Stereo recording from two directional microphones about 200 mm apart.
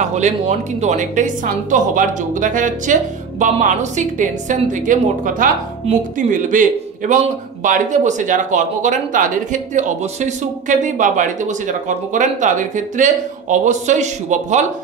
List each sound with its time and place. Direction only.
0.0 s a woman's voice: 35° right (ahead or behind)